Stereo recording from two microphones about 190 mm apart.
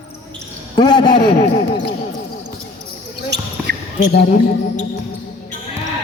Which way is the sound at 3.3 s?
65° right (ahead or behind).